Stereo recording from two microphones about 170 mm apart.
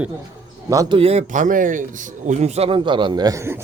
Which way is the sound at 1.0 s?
35° right (ahead or behind).